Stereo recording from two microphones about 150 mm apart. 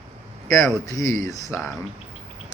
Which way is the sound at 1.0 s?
60° right (ahead or behind).